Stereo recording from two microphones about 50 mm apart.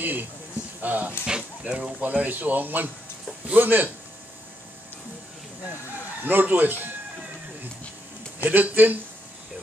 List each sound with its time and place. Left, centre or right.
0.0 s a sound: right
0.7 s speech: right
1.2 s speech: centre
2.0 s speech: right
6.2 s speech: right
8.5 s speech: right